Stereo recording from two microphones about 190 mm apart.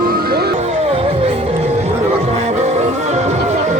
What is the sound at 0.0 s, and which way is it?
Music, 50° right (ahead or behind).